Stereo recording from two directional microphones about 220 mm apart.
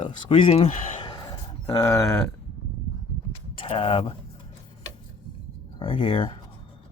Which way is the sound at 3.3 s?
25° left (ahead or behind).